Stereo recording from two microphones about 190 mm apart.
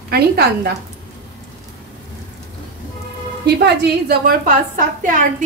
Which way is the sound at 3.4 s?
60° right (ahead or behind).